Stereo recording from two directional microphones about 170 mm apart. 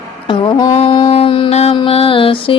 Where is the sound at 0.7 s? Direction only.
30° left (ahead or behind).